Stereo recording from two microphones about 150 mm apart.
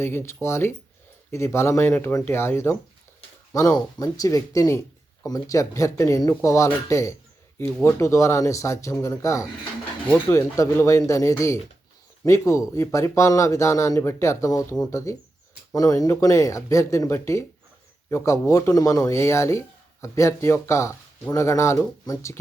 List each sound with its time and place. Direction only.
0.0 s speech: 15° left (ahead or behind)
3.8 s speech: 25° left (ahead or behind)